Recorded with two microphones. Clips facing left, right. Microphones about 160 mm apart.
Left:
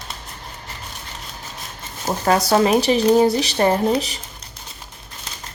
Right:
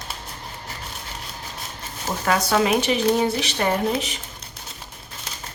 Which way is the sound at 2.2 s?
35° left (ahead or behind).